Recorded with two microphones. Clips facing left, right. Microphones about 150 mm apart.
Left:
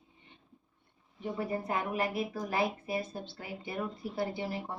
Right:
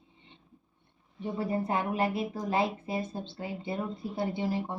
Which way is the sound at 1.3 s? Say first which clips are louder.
Right 4 dB; 30° right (ahead or behind).